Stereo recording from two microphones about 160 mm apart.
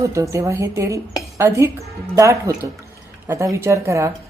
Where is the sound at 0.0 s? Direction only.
20° right (ahead or behind).